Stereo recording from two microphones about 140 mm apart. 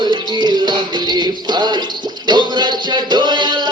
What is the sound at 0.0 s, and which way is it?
Music, 30° right (ahead or behind).